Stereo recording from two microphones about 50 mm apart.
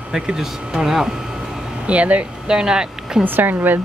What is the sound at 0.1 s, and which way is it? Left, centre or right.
Speech, centre.